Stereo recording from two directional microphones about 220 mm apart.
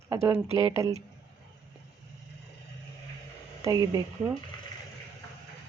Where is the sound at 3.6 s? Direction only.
15° right (ahead or behind).